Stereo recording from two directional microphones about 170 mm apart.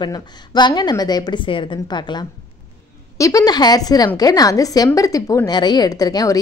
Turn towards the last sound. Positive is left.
turn(degrees=20)  # may be behind; listen again after turning